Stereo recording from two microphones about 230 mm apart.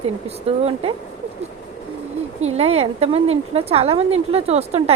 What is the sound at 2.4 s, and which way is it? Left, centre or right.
A woman's voice, right.